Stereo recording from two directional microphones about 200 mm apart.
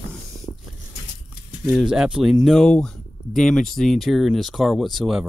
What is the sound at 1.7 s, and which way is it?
Speech, 5° right (ahead or behind).